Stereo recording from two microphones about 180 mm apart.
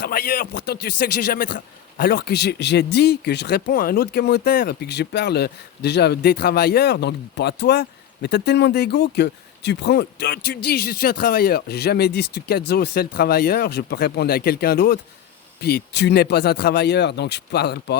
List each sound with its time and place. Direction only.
0.0 s speech: 55° left (ahead or behind)